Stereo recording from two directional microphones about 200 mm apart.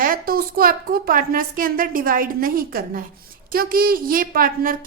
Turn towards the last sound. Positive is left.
turn(degrees=-45)  # may be behind; listen again after turning